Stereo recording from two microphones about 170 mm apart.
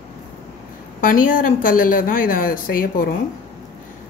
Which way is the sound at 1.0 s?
55° left (ahead or behind).